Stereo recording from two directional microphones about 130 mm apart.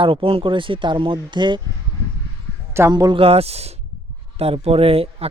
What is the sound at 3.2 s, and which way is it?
Speech, 50° right (ahead or behind).